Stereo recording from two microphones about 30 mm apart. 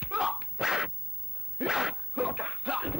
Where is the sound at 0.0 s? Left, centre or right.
Centre.